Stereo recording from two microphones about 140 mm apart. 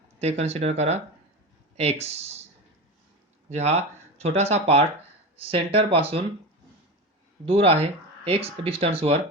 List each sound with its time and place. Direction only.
0.2 s speech: 50° right (ahead or behind)
3.5 s speech: 50° right (ahead or behind)
7.4 s speech: 45° right (ahead or behind)